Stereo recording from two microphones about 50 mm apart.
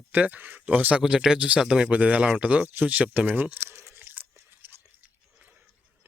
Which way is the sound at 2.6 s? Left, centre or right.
Right.